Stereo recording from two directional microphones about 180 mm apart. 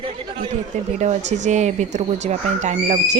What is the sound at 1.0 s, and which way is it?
Speech, 40° right (ahead or behind).